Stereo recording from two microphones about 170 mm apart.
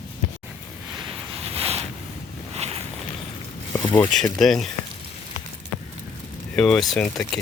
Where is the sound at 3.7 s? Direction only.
15° left (ahead or behind).